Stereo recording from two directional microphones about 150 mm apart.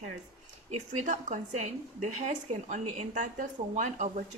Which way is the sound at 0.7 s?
55° right (ahead or behind).